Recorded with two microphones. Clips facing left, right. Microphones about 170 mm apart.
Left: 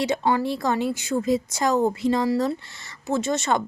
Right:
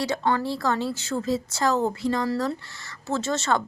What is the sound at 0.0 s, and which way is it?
A woman's voice, 20° left (ahead or behind).